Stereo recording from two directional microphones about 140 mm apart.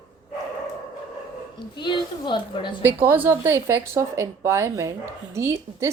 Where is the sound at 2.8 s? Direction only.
15° right (ahead or behind).